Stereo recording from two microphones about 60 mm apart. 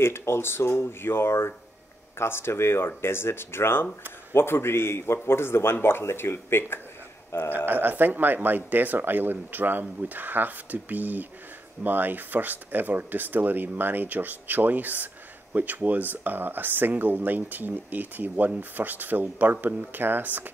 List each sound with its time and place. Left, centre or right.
0.0 s a man's voice: left
7.5 s speech: right